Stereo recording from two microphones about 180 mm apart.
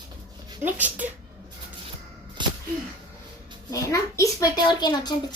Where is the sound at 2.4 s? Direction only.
25° right (ahead or behind).